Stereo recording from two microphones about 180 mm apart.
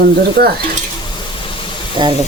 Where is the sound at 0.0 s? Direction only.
60° right (ahead or behind).